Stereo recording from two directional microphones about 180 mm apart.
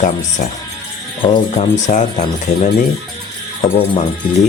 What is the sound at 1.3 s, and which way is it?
Speech, 40° left (ahead or behind).